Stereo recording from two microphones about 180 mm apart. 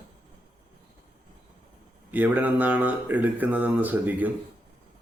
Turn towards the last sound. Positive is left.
turn(degrees=-10)  # may be behind; listen again after turning